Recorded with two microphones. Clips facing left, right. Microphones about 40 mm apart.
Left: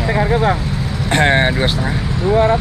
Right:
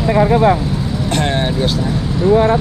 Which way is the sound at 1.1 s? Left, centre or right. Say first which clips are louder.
Left 5 dB; left.